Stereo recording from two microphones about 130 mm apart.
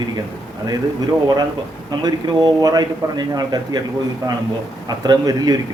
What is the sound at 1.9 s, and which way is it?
A man's voice, 30° right (ahead or behind).